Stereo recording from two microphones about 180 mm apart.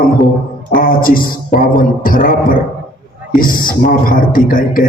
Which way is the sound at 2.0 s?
50° left (ahead or behind).